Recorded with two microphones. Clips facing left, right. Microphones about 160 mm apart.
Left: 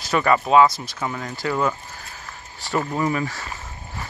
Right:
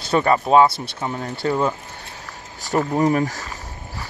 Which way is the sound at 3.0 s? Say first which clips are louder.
Right 5 dB; 45° right (ahead or behind).